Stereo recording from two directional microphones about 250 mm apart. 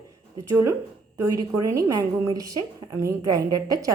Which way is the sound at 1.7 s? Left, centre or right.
Centre.